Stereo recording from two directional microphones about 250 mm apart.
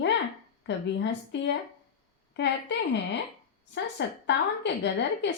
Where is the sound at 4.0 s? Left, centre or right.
Left.